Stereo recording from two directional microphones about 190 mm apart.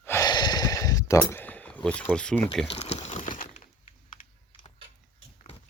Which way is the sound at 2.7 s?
35° left (ahead or behind).